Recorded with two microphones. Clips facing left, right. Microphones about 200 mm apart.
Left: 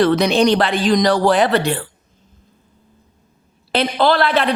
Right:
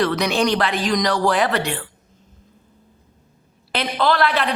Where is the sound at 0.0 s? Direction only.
25° left (ahead or behind).